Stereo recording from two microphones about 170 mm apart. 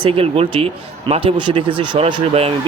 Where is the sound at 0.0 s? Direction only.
30° right (ahead or behind).